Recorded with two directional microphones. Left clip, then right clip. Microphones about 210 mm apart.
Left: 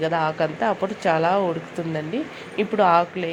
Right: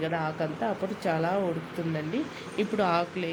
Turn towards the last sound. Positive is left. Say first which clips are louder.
# left 9 dB
turn(degrees=0)  # may be behind; listen again after turning